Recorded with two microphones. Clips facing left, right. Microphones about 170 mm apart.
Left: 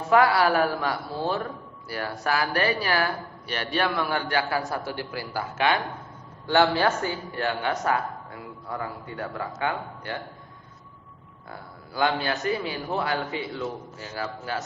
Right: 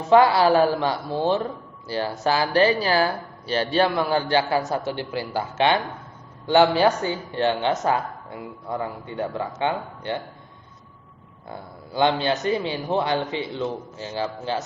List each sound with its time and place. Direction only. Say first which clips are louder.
0.1 s speech: right 4 dB; 25° right (ahead or behind)
11.4 s speech: right 4 dB; 25° right (ahead or behind)